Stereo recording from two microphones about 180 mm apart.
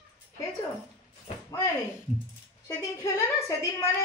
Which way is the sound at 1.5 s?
15° left (ahead or behind).